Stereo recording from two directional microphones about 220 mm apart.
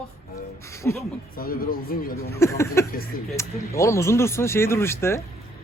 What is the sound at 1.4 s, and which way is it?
Speech, 40° left (ahead or behind).